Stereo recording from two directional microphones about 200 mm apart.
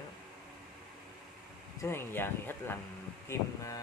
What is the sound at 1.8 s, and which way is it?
Speech, 10° left (ahead or behind).